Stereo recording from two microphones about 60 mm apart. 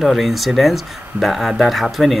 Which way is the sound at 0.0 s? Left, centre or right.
Centre.